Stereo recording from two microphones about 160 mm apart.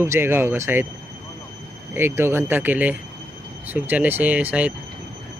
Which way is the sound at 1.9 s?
15° right (ahead or behind).